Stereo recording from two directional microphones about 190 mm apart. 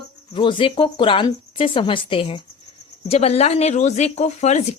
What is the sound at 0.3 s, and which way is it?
Speech, 25° left (ahead or behind).